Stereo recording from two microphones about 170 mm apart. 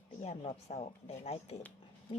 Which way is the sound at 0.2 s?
40° left (ahead or behind).